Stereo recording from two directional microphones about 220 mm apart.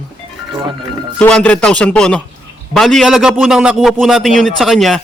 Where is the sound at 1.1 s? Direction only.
5° left (ahead or behind).